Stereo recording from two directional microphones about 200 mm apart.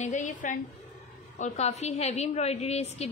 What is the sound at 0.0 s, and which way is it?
A woman's voice, 40° left (ahead or behind).